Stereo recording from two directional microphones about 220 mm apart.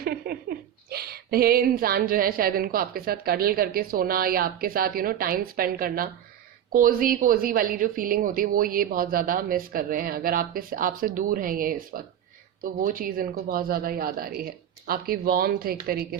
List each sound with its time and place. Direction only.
0.0 s a woman's voice: 45° right (ahead or behind)